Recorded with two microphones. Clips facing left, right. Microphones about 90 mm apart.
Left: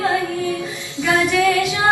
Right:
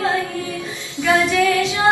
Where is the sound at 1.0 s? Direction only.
20° right (ahead or behind).